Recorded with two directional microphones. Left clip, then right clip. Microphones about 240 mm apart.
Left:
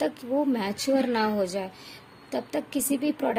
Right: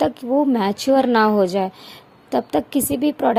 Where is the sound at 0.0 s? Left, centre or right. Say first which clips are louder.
Right 8 dB; right.